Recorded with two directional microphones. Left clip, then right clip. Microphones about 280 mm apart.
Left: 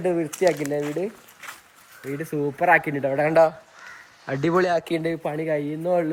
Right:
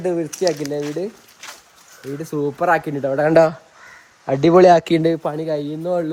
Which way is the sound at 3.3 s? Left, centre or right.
Right.